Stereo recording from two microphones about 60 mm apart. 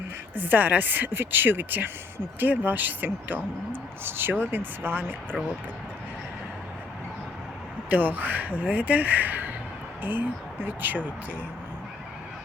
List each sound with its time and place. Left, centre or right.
0.3 s speech: right
7.9 s speech: right